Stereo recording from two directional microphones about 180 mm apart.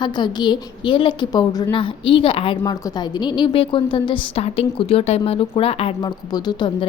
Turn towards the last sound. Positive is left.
turn(degrees=25)  # may be behind; listen again after turning